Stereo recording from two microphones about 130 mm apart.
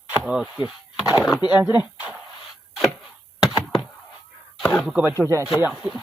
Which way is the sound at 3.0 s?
5° right (ahead or behind).